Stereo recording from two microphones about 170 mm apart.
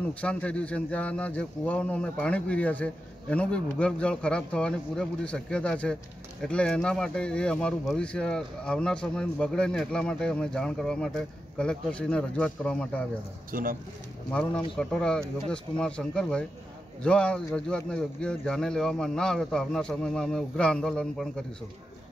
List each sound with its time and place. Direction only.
0.2 s a man's voice: 5° left (ahead or behind)
13.5 s speech: 55° right (ahead or behind)
14.3 s speech: 5° left (ahead or behind)